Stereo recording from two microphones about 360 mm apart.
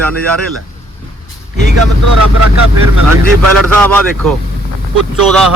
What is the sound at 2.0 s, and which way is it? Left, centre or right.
Speech, right.